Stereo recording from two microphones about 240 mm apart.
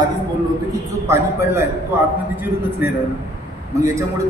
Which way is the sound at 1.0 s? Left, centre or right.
Centre.